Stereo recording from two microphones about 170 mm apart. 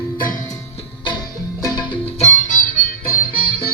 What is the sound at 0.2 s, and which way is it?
Music, 50° left (ahead or behind).